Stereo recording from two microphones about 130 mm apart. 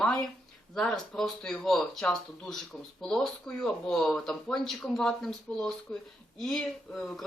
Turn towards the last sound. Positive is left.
turn(degrees=5)  # may be behind; listen again after turning